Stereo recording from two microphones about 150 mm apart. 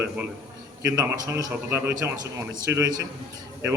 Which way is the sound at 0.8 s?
20° right (ahead or behind).